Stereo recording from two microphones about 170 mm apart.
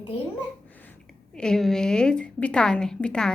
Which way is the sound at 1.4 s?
5° left (ahead or behind).